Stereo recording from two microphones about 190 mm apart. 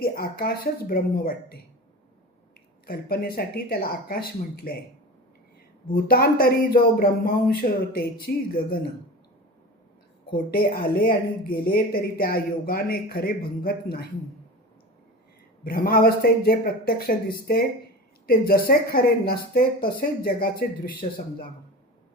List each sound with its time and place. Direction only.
0.0 s speech: 50° left (ahead or behind)
2.8 s speech: 50° left (ahead or behind)
5.9 s speech: 50° left (ahead or behind)
10.3 s speech: 50° left (ahead or behind)
15.6 s speech: 50° left (ahead or behind)